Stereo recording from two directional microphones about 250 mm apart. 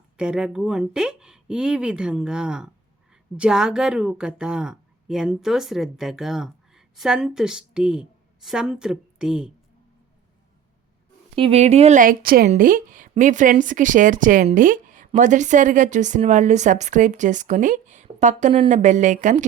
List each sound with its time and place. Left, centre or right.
0.2 s a woman's voice: centre
11.3 s a woman's voice: right